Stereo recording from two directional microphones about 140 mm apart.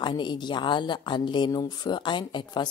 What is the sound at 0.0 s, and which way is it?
Speech, 35° left (ahead or behind).